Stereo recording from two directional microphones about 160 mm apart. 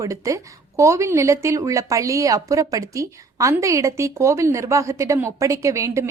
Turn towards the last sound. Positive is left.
turn(degrees=-20)  # may be behind; listen again after turning